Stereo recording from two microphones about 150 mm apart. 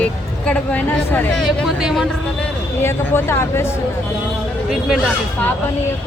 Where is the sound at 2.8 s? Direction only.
15° left (ahead or behind).